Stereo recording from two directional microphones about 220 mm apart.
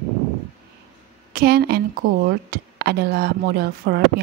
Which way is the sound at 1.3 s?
45° right (ahead or behind).